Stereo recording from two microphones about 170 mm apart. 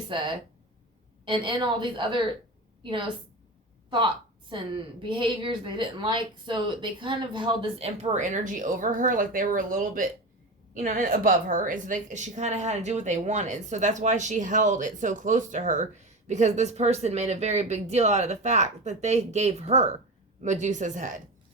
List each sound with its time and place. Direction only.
0.1 s a woman's voice: 30° right (ahead or behind)
3.8 s a sound: 30° right (ahead or behind)
5.0 s a woman's voice: 30° right (ahead or behind); by 21.2 s 50° right (ahead or behind)